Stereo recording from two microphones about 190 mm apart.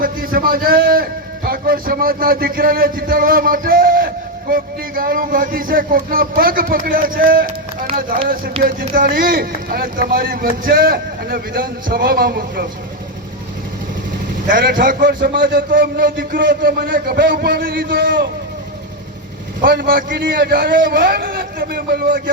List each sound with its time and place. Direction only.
0.0 s a man's voice: 50° right (ahead or behind)
8.6 s speech: 50° right (ahead or behind)
14.4 s speech: 50° right (ahead or behind)
19.6 s speech: 50° right (ahead or behind)